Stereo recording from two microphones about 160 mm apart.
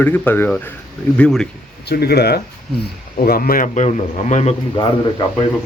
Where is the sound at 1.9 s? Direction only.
85° left.